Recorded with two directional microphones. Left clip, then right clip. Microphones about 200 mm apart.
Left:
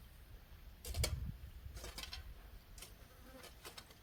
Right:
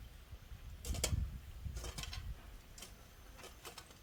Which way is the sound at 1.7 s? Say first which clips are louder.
Right 1 dB; 25° left (ahead or behind).